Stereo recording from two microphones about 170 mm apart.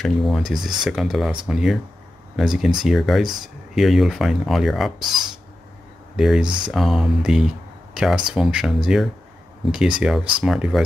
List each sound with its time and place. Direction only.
0.0 s speech: centre (ahead or behind)
6.4 s speech: 25° right (ahead or behind)
6.7 s speech: centre (ahead or behind)